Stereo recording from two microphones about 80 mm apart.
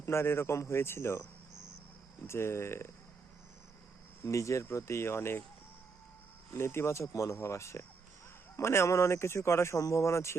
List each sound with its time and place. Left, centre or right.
0.0 s speech: left
4.3 s speech: left
6.5 s speech: left